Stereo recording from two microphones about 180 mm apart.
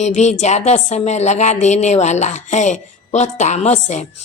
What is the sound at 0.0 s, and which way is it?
Speech, 40° left (ahead or behind).